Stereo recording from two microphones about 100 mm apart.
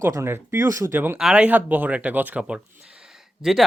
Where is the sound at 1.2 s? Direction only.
10° right (ahead or behind).